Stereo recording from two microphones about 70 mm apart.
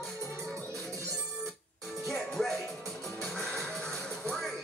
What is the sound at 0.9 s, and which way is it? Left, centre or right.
Music, right.